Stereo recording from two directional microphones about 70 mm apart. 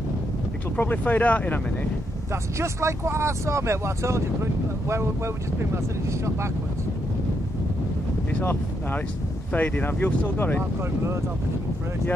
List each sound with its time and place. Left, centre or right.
0.7 s speech: left
2.6 s speech: right
9.5 s speech: left